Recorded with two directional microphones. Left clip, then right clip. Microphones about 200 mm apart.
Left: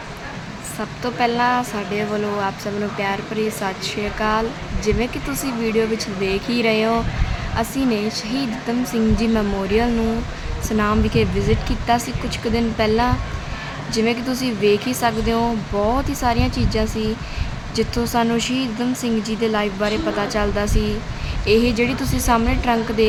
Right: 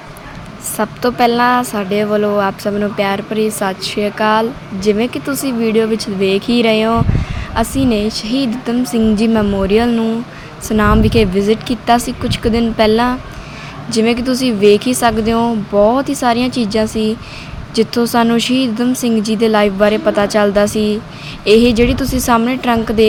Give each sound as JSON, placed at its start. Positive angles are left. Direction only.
{"t": 0.8, "sound": "speech", "side_deg": -25}